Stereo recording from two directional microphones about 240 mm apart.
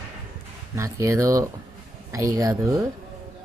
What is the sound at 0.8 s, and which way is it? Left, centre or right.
Speech, centre.